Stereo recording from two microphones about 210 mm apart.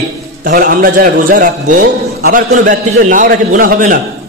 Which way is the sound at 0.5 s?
45° right (ahead or behind).